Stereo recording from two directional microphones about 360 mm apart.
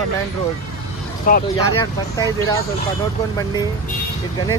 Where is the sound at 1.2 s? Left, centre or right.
Left.